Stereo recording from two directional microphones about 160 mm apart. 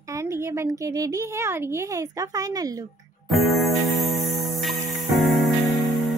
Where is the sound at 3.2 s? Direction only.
Centre (ahead or behind).